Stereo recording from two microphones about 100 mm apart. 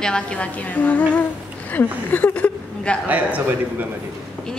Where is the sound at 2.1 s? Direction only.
20° left (ahead or behind).